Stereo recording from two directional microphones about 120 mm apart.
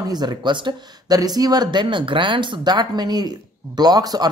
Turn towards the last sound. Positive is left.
turn(degrees=-35)  # may be behind; listen again after turning